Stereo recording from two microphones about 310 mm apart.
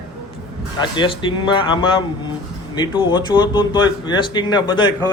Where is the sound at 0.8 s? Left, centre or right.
Centre.